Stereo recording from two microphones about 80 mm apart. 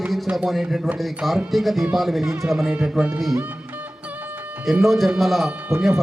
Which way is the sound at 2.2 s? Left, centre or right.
Right.